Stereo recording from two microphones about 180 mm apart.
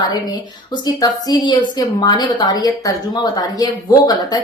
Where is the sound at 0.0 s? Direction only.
20° left (ahead or behind).